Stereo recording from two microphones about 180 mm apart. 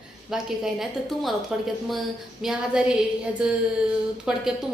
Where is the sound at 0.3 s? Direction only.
5° right (ahead or behind).